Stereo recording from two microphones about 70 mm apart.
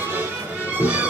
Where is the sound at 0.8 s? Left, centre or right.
Right.